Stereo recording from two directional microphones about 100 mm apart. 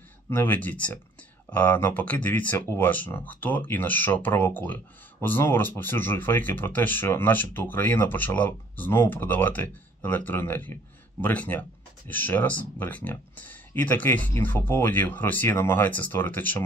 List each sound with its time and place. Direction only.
0.3 s speech: 20° left (ahead or behind)